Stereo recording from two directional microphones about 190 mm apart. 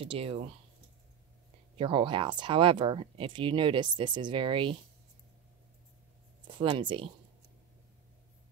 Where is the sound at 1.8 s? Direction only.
25° right (ahead or behind).